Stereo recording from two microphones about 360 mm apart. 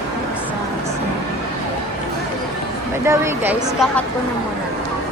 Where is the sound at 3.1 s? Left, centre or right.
Centre.